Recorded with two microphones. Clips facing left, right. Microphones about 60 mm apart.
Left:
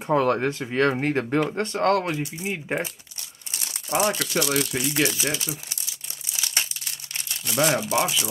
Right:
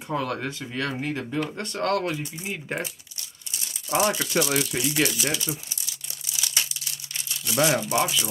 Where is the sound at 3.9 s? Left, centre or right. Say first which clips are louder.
Even; centre.